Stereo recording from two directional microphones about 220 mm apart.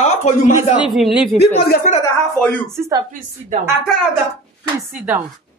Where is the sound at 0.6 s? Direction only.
5° right (ahead or behind).